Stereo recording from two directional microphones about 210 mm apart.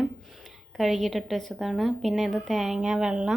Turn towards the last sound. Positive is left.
turn(degrees=-5)  # may be behind; listen again after turning